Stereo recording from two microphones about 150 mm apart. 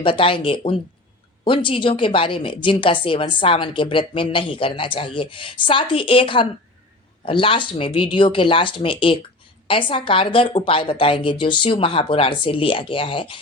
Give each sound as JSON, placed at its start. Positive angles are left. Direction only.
{"t": 0.0, "sound": "a woman's voice", "side_deg": 35}